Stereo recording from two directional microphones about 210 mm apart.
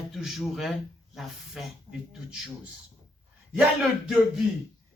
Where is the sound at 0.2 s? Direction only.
Centre (ahead or behind).